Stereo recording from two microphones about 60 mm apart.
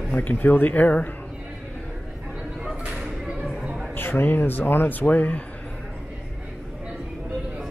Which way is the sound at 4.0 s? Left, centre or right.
Left.